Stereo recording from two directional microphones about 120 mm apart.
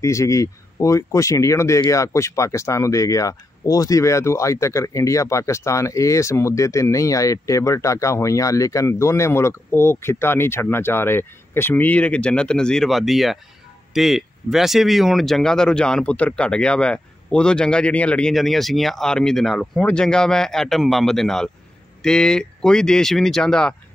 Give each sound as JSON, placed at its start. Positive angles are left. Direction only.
{"t": 0.0, "sound": "speech", "side_deg": 25}